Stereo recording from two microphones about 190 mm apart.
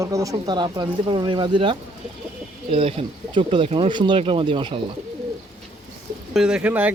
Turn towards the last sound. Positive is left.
turn(degrees=-10)  # may be behind; listen again after turning